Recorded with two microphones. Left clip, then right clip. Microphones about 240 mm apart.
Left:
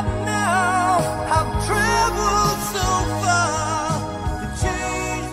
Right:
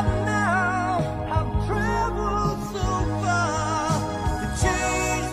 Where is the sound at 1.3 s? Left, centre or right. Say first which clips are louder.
Left 9 dB; left.